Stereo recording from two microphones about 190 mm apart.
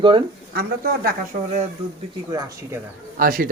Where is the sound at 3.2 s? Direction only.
50° right (ahead or behind).